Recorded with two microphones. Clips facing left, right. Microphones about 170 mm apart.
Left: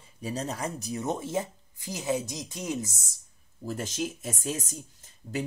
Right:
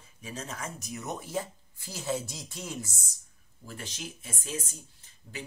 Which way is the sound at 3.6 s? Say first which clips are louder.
Left 10 dB; 40° left (ahead or behind).